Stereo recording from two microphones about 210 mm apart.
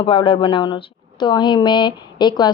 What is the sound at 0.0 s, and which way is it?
A woman's voice, 25° left (ahead or behind).